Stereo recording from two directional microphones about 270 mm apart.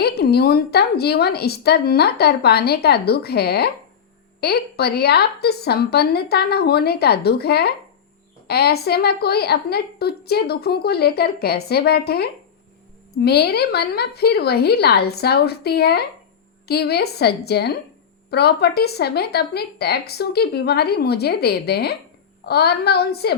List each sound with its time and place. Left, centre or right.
0.0 s a woman's voice: left